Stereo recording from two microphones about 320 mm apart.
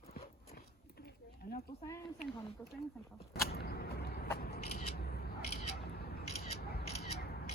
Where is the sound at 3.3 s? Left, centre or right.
Left.